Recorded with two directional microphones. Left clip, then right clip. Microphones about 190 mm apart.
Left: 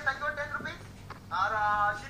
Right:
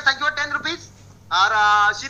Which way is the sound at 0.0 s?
55° right (ahead or behind).